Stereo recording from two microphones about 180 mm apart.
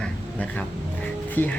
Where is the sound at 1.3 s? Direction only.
10° left (ahead or behind).